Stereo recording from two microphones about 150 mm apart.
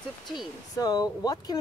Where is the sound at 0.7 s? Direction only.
25° left (ahead or behind).